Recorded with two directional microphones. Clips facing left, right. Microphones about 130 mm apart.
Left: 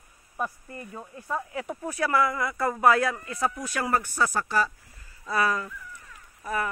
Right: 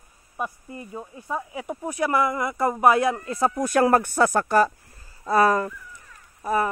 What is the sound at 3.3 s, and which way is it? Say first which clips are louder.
Speech: right 5 dB; 35° right (ahead or behind).